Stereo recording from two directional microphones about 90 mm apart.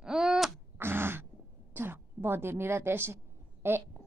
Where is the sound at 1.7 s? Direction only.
25° right (ahead or behind).